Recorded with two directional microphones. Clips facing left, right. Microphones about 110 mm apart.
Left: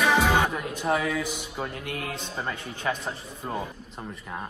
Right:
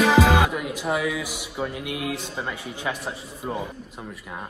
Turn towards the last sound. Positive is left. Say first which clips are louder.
# right 2 dB
turn(degrees=-5)  # may be behind; listen again after turning